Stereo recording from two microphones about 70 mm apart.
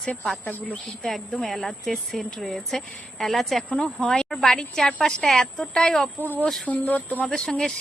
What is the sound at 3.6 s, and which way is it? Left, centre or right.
Speech, centre.